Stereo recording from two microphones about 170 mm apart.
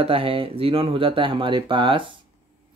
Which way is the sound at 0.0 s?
35° right (ahead or behind).